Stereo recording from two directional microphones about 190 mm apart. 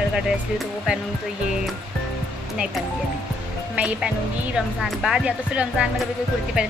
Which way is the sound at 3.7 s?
5° right (ahead or behind).